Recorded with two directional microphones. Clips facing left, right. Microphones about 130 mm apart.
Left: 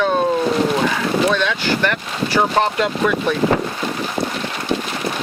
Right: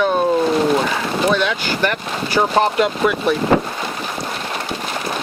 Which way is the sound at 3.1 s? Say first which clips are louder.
Even; 10° right (ahead or behind).